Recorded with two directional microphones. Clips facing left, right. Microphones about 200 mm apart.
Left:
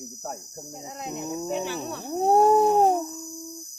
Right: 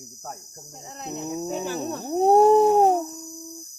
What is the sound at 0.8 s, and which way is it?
Speech, 15° left (ahead or behind).